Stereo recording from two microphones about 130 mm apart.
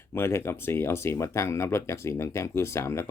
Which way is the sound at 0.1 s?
20° left (ahead or behind).